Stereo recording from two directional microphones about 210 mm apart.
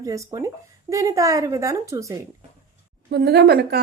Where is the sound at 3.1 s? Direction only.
50° right (ahead or behind).